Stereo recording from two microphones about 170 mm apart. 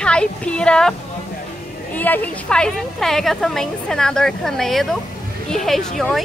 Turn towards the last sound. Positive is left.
turn(degrees=0)  # may be behind; listen again after turning